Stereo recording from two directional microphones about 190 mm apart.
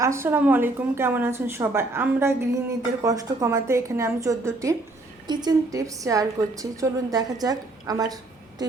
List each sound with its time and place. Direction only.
0.0 s a woman's voice: 15° right (ahead or behind)